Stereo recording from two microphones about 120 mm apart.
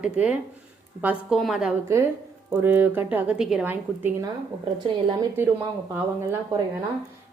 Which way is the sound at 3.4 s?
5° right (ahead or behind).